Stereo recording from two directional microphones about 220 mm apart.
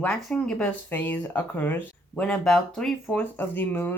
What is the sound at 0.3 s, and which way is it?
Speech, 5° left (ahead or behind).